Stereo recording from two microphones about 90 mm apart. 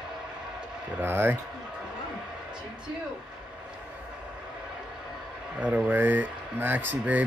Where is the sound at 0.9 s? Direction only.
25° right (ahead or behind).